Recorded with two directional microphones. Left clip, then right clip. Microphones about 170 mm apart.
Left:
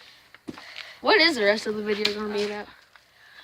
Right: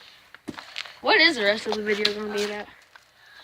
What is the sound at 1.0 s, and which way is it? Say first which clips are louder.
Speech: right 1 dB; 30° left (ahead or behind).